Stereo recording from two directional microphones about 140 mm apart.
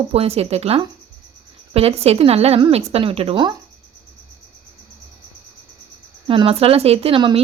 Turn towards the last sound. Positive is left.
turn(degrees=-40)  # may be behind; listen again after turning